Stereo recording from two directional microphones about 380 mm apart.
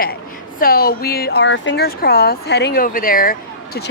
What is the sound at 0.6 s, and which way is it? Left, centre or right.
Speech, left.